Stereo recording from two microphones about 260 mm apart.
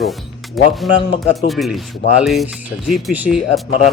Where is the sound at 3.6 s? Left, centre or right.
Left.